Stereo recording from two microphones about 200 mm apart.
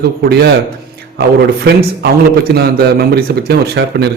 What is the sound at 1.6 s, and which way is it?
Speech, 55° right (ahead or behind).